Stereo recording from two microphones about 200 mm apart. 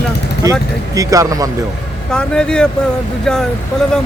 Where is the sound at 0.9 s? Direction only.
15° right (ahead or behind).